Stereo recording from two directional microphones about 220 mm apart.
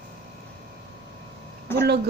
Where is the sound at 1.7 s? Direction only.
10° left (ahead or behind).